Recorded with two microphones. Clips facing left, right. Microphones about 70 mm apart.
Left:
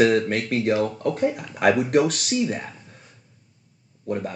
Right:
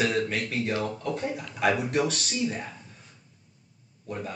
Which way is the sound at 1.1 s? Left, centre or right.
Left.